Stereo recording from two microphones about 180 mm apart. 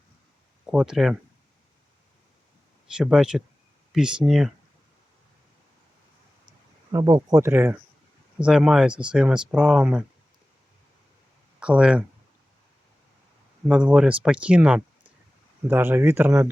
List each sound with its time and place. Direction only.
0.6 s speech: 5° right (ahead or behind)
2.9 s speech: 5° right (ahead or behind)
6.9 s speech: 20° right (ahead or behind); by 10.0 s 5° right (ahead or behind)
11.6 s speech: 5° right (ahead or behind)
13.7 s speech: 5° right (ahead or behind)